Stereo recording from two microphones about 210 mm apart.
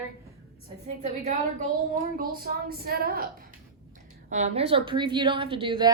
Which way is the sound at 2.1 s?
45° right (ahead or behind).